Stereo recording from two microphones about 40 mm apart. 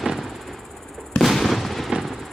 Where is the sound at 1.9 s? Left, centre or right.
Centre.